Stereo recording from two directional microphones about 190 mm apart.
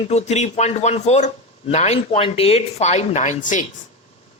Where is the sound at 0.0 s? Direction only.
35° left (ahead or behind).